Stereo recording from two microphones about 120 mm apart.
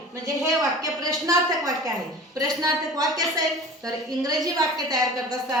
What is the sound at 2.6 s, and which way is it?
A woman's voice, 30° right (ahead or behind).